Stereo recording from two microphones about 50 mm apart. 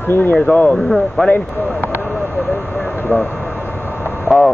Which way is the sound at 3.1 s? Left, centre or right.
Left.